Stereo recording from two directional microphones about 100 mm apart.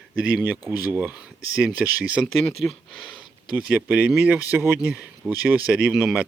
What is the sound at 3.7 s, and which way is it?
Speech, 15° right (ahead or behind).